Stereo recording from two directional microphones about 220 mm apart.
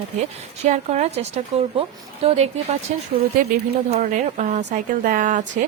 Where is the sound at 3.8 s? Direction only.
30° right (ahead or behind).